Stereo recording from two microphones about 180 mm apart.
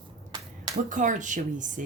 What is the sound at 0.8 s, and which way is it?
Speech, 45° right (ahead or behind).